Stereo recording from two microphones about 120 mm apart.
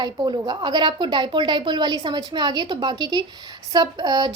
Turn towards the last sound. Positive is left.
turn(degrees=-35)  # may be behind; listen again after turning